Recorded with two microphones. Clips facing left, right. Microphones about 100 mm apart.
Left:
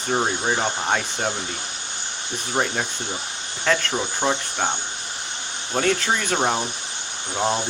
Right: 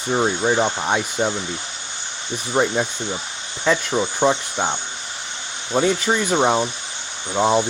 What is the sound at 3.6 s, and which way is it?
Speech, 15° right (ahead or behind).